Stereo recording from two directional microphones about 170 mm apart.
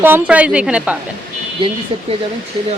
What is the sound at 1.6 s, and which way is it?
Speech, 30° right (ahead or behind).